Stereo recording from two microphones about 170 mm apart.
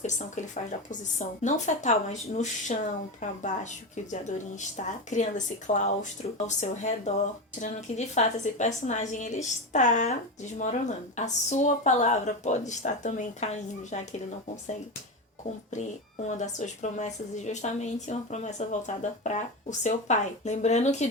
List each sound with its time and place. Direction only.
0.0 s a woman's voice: 45° left (ahead or behind)
4.8 s a woman's voice: 45° left (ahead or behind)
16.2 s a woman's voice: 45° left (ahead or behind)